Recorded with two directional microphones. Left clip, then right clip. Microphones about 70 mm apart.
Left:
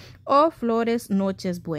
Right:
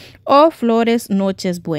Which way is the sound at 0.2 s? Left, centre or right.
Right.